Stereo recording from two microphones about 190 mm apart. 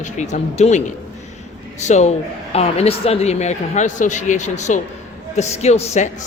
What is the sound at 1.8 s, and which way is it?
A woman's voice, 35° left (ahead or behind).